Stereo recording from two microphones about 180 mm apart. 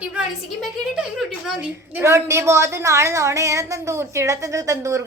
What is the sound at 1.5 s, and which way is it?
A woman's voice, 10° right (ahead or behind).